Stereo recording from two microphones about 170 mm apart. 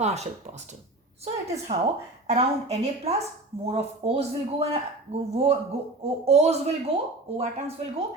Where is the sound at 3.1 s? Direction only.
35° right (ahead or behind).